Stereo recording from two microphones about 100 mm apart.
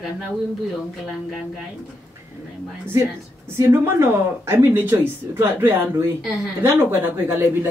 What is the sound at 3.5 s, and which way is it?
Speech, 25° right (ahead or behind).